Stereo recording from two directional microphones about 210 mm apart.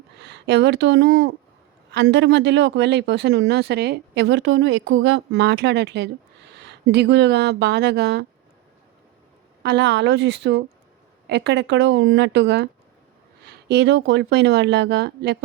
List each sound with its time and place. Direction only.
0.2 s speech: 55° right (ahead or behind)
9.6 s speech: 55° right (ahead or behind)